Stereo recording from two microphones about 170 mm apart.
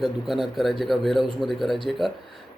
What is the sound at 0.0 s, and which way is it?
A man's voice, centre (ahead or behind).